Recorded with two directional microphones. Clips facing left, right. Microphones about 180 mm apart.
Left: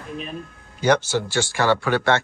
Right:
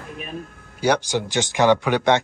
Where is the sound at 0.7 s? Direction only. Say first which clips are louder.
Left 1 dB; 10° right (ahead or behind).